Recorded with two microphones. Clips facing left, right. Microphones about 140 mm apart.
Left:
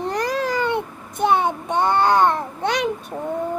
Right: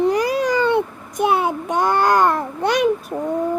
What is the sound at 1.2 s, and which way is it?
Child singing, 5° right (ahead or behind).